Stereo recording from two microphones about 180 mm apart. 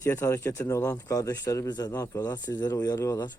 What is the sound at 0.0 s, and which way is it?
A man's voice, 15° left (ahead or behind).